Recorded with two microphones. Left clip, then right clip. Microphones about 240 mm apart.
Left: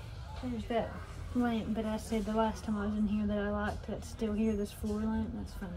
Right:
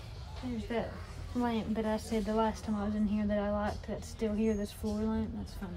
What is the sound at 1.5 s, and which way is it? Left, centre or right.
Speech, right.